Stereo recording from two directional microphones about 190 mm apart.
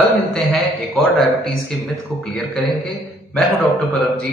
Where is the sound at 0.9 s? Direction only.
Centre (ahead or behind).